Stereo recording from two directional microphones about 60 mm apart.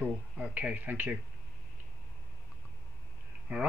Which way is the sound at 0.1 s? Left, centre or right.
Right.